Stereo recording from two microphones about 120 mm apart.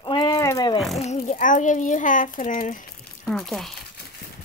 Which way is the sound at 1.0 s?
70° left (ahead or behind).